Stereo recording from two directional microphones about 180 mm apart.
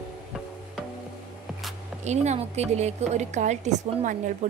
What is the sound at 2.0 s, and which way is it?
A woman's voice, 40° right (ahead or behind).